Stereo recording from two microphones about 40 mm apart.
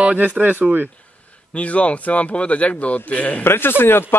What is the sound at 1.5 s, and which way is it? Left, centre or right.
A man's voice, left.